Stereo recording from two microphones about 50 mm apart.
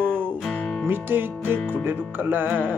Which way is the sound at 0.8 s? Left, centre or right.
Right.